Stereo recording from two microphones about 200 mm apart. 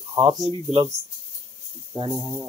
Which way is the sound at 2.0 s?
20° right (ahead or behind).